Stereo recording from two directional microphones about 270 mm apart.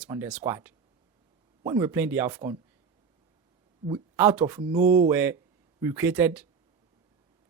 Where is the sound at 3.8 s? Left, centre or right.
Centre.